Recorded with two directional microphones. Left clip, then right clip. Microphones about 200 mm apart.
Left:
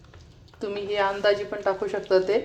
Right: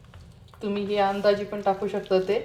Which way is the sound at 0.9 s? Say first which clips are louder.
Even; 30° left (ahead or behind).